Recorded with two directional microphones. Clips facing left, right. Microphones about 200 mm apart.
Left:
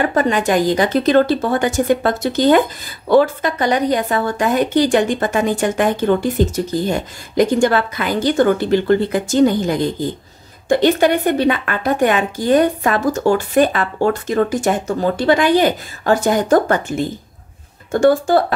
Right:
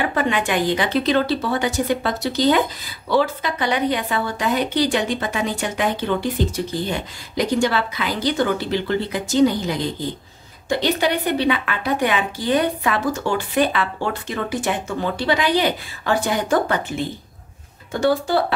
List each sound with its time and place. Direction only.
0.0 s speech: 40° left (ahead or behind)